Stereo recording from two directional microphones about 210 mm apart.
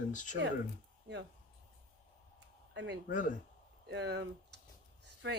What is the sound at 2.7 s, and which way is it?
Speech, 60° right (ahead or behind).